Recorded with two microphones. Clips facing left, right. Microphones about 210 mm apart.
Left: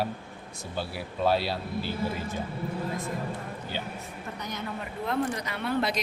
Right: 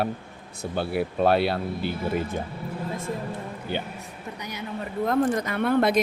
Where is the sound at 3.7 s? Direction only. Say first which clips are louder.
Right 7 dB; 60° right (ahead or behind).